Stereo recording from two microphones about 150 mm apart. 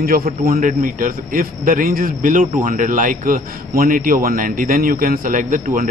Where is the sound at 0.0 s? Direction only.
75° right (ahead or behind).